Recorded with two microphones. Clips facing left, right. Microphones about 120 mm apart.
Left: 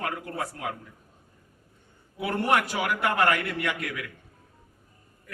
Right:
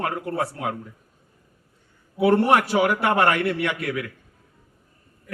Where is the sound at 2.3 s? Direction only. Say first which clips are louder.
Right 4 dB; 30° right (ahead or behind).